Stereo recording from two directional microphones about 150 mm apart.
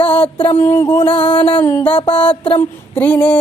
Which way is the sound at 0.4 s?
15° left (ahead or behind).